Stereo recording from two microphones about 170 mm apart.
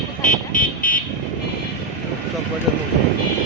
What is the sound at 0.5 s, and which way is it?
Speech, 55° left (ahead or behind).